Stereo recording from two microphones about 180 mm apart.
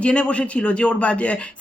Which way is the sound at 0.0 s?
5° left (ahead or behind).